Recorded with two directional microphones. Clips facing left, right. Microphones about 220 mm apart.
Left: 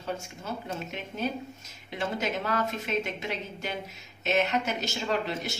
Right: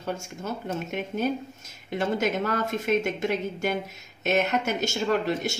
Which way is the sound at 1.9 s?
50° right (ahead or behind).